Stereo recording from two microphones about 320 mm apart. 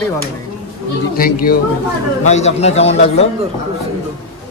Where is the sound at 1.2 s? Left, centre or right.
Left.